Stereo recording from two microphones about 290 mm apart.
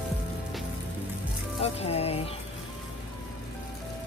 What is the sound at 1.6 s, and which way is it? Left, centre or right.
Music, left.